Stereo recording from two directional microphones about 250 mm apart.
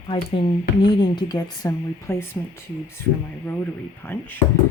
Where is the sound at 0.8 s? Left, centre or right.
Centre.